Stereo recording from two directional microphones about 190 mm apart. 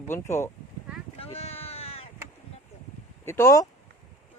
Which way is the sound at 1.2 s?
30° left (ahead or behind).